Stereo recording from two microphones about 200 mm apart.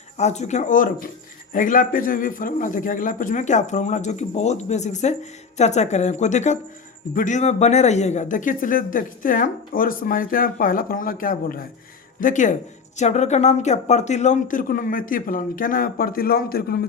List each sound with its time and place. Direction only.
0.2 s a man's voice: 35° left (ahead or behind); by 16.8 s 50° left (ahead or behind)